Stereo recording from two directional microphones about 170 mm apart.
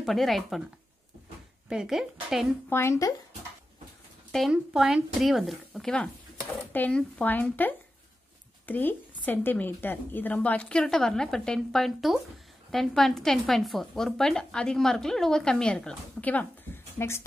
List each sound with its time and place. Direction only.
0.0 s speech: centre (ahead or behind)
1.7 s speech: 5° right (ahead or behind)
2.7 s speech: 15° left (ahead or behind)
4.3 s speech: centre (ahead or behind)